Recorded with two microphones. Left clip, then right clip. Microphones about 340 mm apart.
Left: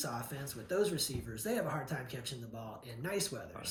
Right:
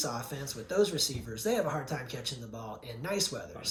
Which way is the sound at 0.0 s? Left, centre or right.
Centre.